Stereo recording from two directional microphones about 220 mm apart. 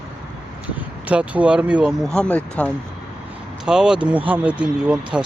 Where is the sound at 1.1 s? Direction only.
5° right (ahead or behind).